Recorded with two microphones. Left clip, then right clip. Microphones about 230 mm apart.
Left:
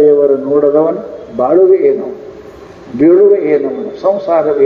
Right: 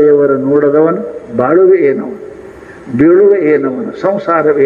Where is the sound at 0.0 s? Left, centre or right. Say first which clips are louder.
Even; right.